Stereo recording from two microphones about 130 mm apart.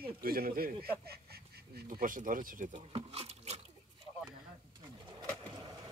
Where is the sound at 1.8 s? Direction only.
90° right.